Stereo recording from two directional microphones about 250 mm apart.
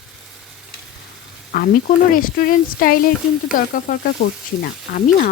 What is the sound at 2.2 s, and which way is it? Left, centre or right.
Speech, left.